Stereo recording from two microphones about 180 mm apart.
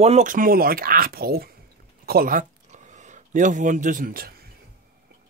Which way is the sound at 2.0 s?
55° right (ahead or behind).